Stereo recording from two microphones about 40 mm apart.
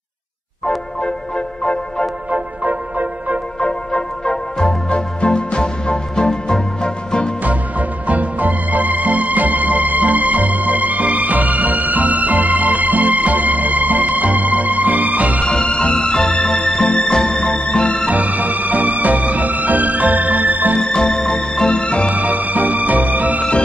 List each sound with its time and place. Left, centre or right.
1.6 s music: left
2.3 s music: right
3.5 s music: left
8.1 s music: right
15.4 s music: left
18.0 s music: right
20.8 s music: centre
22.1 s music: right